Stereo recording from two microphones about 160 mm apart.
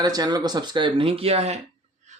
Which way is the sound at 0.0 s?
25° right (ahead or behind).